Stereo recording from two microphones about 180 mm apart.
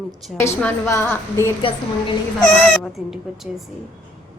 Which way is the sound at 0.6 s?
15° left (ahead or behind).